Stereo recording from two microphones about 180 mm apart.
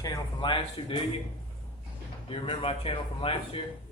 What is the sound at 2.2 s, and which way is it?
Speech, 30° left (ahead or behind).